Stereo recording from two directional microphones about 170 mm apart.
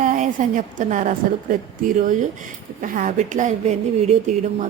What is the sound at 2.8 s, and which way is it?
Speech, 50° right (ahead or behind).